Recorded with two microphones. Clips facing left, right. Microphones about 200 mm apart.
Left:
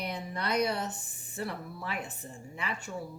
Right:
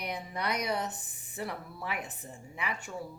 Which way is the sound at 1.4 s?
15° right (ahead or behind).